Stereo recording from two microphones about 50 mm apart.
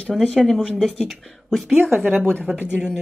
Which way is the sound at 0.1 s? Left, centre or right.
Centre.